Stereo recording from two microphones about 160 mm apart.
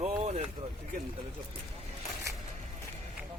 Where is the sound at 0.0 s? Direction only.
40° right (ahead or behind).